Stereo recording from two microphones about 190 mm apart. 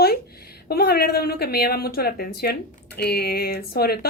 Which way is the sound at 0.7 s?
55° left (ahead or behind).